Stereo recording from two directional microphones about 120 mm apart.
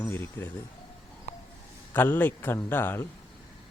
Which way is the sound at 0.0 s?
20° left (ahead or behind).